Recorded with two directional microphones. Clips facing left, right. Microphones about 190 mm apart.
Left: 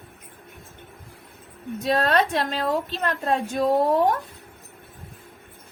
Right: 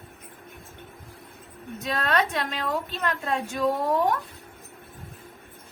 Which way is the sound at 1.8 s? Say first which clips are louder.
Left 5 dB; 35° left (ahead or behind).